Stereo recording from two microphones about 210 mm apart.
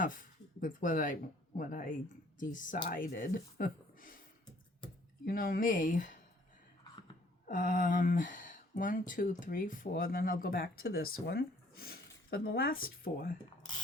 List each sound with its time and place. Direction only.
0.0 s speech: 40° left (ahead or behind)
5.2 s speech: 45° left (ahead or behind)
7.4 s speech: 40° left (ahead or behind)